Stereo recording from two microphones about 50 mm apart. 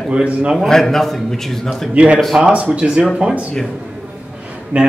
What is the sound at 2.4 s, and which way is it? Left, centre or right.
Speech, right.